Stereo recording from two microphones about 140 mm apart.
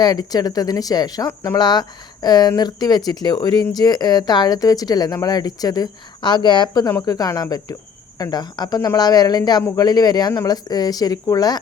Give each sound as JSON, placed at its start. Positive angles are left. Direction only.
{"t": 0.0, "sound": "speech", "side_deg": 30}